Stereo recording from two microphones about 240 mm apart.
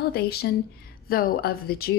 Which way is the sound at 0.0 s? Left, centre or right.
Left.